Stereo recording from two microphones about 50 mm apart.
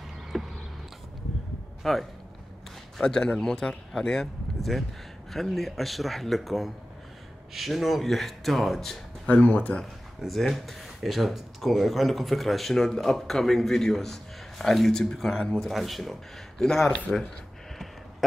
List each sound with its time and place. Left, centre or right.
0.3 s a sound: centre
1.8 s speech: centre
3.0 s a man's voice: centre
9.2 s speech: left
10.2 s speech: centre